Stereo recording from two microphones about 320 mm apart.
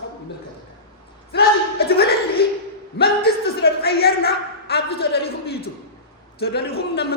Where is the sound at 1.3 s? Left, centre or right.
Left.